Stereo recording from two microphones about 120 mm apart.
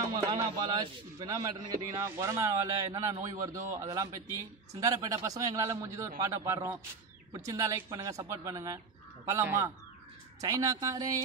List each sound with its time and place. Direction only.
0.4 s a man's voice: 35° right (ahead or behind)
2.0 s a man's voice: 20° right (ahead or behind)